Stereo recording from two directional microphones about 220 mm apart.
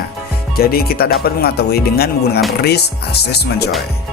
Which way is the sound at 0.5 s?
45° left (ahead or behind).